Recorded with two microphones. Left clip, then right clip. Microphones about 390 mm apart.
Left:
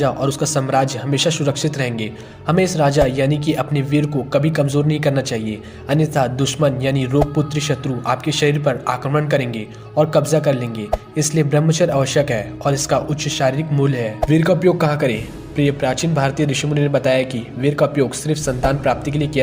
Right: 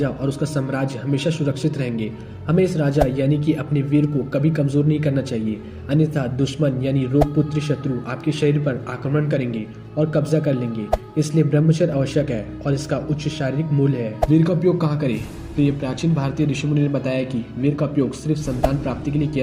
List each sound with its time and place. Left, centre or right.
0.0 s a man's voice: left